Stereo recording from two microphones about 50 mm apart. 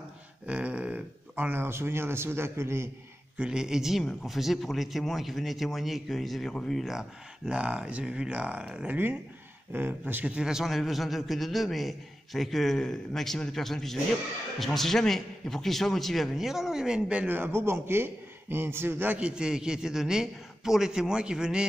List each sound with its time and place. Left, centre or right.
0.5 s a sound: right
1.3 s a man's voice: right
3.3 s a man's voice: centre
4.0 s a man's voice: centre
6.9 s speech: centre
8.8 s speech: right
10.3 s a man's voice: centre
17.4 s a man's voice: right
19.1 s a man's voice: centre